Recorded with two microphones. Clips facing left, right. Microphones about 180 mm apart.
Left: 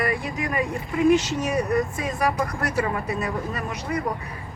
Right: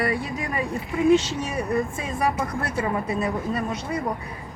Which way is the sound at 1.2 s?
30° right (ahead or behind).